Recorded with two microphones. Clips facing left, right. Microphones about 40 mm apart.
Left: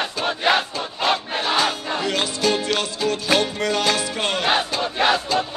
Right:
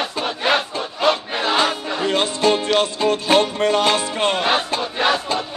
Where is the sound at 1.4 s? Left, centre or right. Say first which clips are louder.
Right 5 dB; right.